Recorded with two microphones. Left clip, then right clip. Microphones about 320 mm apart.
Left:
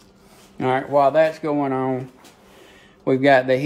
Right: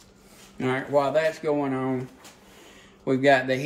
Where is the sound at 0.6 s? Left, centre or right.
Left.